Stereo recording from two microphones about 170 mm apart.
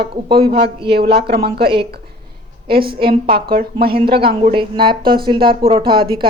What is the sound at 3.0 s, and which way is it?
A woman's voice, 60° right (ahead or behind).